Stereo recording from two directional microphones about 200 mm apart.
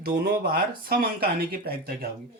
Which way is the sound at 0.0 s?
50° right (ahead or behind).